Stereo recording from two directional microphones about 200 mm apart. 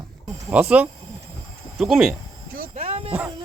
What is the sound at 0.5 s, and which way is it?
Speech, 5° right (ahead or behind).